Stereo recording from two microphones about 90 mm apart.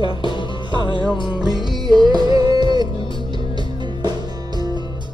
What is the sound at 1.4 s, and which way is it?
Music, 55° right (ahead or behind).